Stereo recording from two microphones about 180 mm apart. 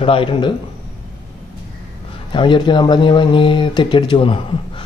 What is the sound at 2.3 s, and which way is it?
Speech, 25° left (ahead or behind).